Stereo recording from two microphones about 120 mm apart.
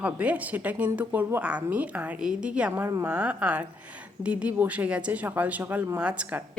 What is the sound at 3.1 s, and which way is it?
A woman's voice, 10° right (ahead or behind).